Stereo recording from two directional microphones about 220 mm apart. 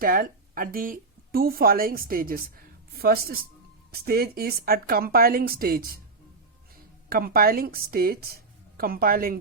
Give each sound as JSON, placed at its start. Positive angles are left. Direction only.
{"t": 0.0, "sound": "a woman's voice", "side_deg": -40}
{"t": 7.1, "sound": "a woman's voice", "side_deg": -40}